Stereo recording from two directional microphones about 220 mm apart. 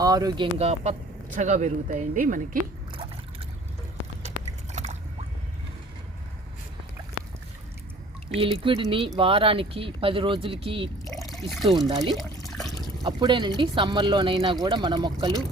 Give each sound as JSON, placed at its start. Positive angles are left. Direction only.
{"t": 0.0, "sound": "speech", "side_deg": -15}
{"t": 0.6, "sound": "speech", "side_deg": -30}
{"t": 4.7, "sound": "biting", "side_deg": -30}
{"t": 8.4, "sound": "speech", "side_deg": -25}
{"t": 11.3, "sound": "speech", "side_deg": 0}
{"t": 11.9, "sound": "speech", "side_deg": -20}
{"t": 12.5, "sound": "water", "side_deg": 0}
{"t": 13.0, "sound": "speech", "side_deg": -20}